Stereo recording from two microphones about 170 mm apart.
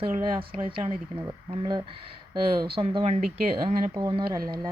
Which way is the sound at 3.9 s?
25° right (ahead or behind).